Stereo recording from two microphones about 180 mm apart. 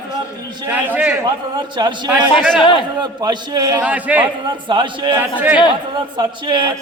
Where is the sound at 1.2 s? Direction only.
25° right (ahead or behind).